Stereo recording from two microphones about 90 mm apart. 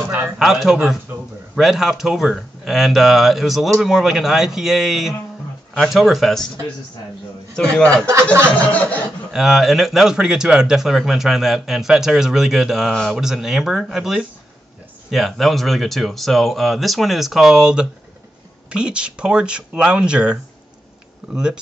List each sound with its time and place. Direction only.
0.4 s speech: 5° right (ahead or behind)
7.5 s chuckle: 10° left (ahead or behind)
8.1 s speech: 30° right (ahead or behind)
8.5 s chuckle: 15° left (ahead or behind)
9.3 s speech: 5° right (ahead or behind)